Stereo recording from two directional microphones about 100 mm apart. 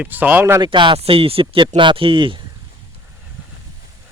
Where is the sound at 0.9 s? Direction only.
75° right (ahead or behind); by 2.4 s 55° right (ahead or behind).